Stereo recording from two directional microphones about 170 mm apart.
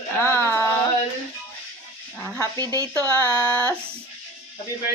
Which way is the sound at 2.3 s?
15° right (ahead or behind).